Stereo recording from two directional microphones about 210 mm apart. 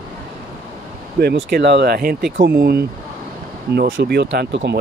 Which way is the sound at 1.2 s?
50° right (ahead or behind).